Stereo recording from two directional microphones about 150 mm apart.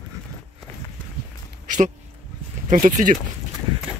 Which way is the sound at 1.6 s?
55° right (ahead or behind).